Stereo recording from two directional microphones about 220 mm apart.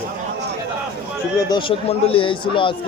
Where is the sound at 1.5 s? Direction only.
25° left (ahead or behind).